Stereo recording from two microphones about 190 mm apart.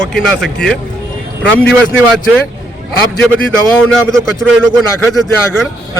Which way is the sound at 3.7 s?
5° left (ahead or behind).